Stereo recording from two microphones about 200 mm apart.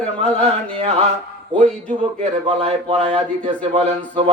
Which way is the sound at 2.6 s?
30° right (ahead or behind).